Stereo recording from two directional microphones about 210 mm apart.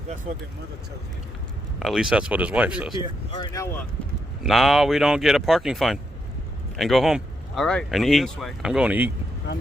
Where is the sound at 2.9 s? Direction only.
20° left (ahead or behind).